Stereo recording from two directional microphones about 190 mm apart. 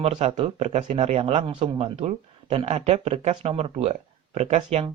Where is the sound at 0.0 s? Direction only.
30° right (ahead or behind).